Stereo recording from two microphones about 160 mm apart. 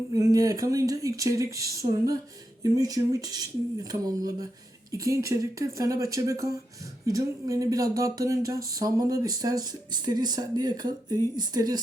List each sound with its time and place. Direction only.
0.1 s speech: 20° right (ahead or behind)